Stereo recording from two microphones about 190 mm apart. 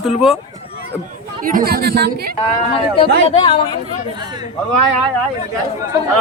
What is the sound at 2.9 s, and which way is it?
Speech, 30° left (ahead or behind).